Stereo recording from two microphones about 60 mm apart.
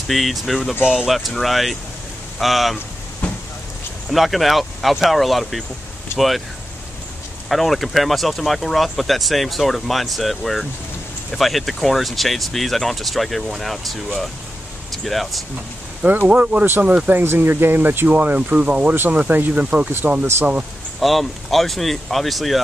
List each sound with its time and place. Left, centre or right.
0.1 s speech: centre
4.1 s speech: centre
7.4 s speech: centre
16.3 s speech: right
17.1 s speech: right
21.0 s speech: centre